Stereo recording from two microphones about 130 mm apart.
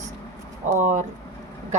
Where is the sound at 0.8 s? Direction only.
70° right (ahead or behind).